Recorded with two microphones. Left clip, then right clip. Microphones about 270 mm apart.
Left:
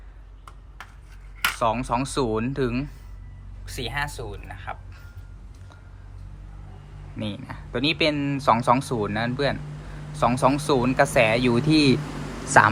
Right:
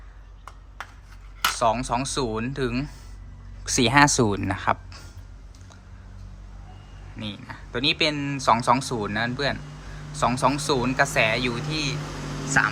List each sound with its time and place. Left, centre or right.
1.5 s speech: centre
3.7 s speech: centre
7.2 s speech: centre